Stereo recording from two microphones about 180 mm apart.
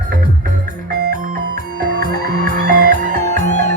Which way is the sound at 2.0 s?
55° right (ahead or behind).